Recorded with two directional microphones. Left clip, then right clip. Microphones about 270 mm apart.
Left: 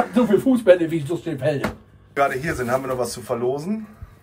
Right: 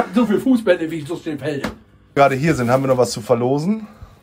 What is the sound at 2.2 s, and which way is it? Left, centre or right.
A man's voice, centre.